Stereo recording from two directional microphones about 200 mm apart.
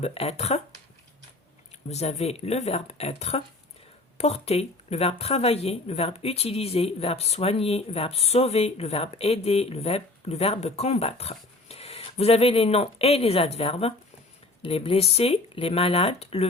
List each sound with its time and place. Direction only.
0.0 s speech: 30° left (ahead or behind)
1.9 s speech: 30° left (ahead or behind)